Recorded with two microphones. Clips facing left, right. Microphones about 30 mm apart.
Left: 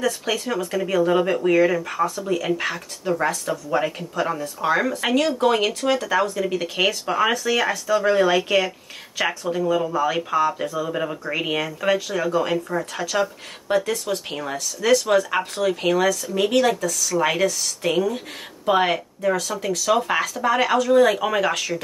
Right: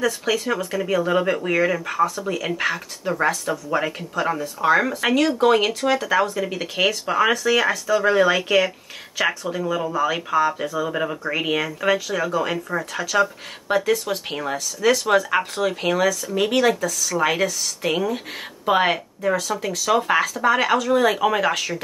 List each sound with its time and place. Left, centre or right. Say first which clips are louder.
0.0 s speech: right 2 dB; centre
19.5 s speech: even; right